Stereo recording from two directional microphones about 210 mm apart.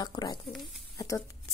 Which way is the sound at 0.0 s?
20° left (ahead or behind).